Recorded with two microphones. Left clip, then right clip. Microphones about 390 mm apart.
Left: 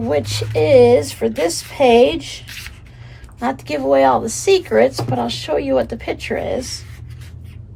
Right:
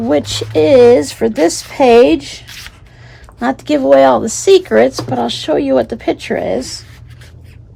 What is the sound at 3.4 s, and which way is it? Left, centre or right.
A woman's voice, right.